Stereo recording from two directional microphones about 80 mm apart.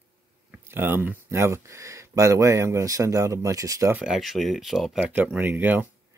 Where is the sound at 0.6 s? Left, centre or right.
Right.